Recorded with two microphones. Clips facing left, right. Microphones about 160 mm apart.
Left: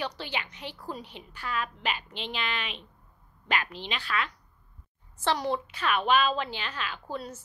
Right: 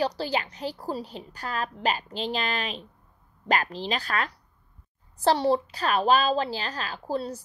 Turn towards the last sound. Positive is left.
turn(degrees=-35)  # may be behind; listen again after turning